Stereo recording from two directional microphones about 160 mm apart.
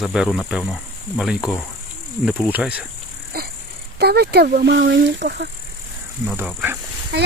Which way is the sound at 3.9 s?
90° right.